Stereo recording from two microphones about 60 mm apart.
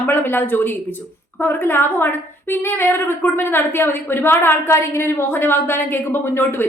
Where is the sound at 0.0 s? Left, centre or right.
Left.